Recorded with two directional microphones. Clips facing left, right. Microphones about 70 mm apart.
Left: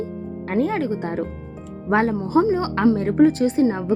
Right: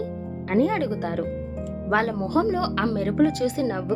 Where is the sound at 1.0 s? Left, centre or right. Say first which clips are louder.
Left 1 dB; left.